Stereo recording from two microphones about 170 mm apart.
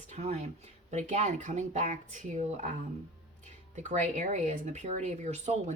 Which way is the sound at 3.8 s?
45° right (ahead or behind).